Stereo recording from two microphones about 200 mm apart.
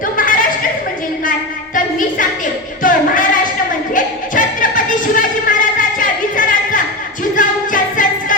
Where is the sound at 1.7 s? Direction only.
40° left (ahead or behind).